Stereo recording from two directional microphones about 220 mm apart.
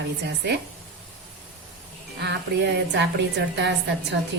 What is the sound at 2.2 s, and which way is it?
A woman's voice, 50° right (ahead or behind).